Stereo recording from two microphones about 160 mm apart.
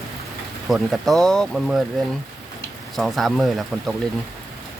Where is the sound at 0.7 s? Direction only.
Centre (ahead or behind).